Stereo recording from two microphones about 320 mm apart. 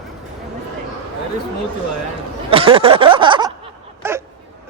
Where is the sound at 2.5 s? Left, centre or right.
Centre.